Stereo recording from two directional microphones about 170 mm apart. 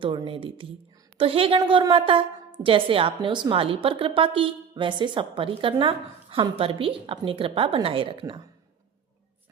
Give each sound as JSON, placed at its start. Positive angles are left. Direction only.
{"t": 0.0, "sound": "a woman's voice", "side_deg": -30}